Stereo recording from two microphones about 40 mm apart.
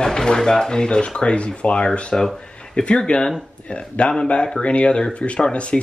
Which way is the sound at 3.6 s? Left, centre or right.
Left.